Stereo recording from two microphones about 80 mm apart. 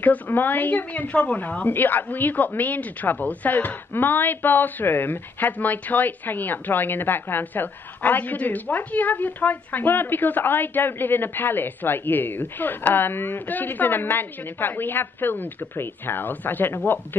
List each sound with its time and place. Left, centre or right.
0.0 s a woman's voice: left